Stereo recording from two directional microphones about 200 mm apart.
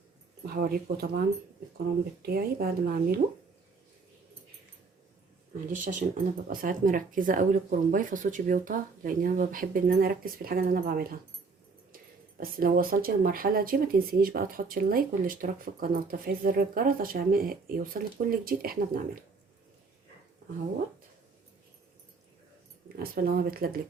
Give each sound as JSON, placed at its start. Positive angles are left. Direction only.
{"t": 0.4, "sound": "speech", "side_deg": -50}
{"t": 2.2, "sound": "speech", "side_deg": -50}
{"t": 5.5, "sound": "speech", "side_deg": -40}
{"t": 12.4, "sound": "speech", "side_deg": -45}
{"t": 23.0, "sound": "speech", "side_deg": -45}